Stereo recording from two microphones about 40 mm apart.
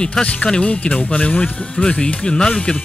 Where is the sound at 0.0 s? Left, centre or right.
Left.